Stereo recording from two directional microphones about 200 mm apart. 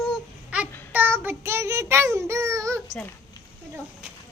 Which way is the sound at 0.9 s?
10° right (ahead or behind).